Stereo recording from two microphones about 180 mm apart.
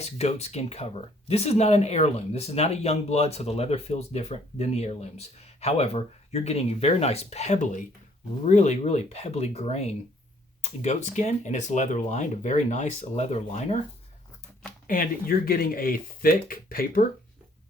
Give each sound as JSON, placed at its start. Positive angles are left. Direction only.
{"t": 0.0, "sound": "speech", "side_deg": 35}
{"t": 14.8, "sound": "speech", "side_deg": 50}